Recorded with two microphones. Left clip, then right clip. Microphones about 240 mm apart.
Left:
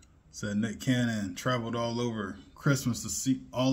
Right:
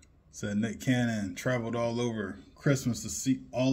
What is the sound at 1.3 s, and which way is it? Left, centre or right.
Speech, left.